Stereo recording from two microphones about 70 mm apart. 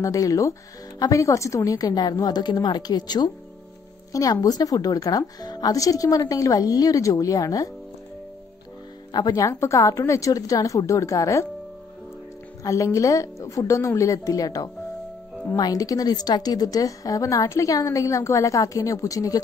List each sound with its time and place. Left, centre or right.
0.0 s a woman's voice: left
4.1 s a woman's voice: left
9.3 s a woman's voice: left
12.6 s a woman's voice: left